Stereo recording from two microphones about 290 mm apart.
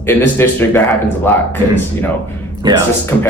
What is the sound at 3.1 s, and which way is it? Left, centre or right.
Speech, centre.